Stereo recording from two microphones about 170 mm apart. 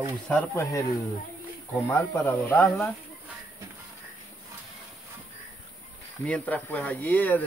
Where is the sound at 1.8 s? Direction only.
15° left (ahead or behind).